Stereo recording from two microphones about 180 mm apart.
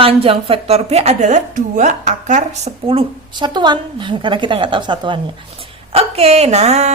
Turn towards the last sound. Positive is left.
turn(degrees=-35)  # may be behind; listen again after turning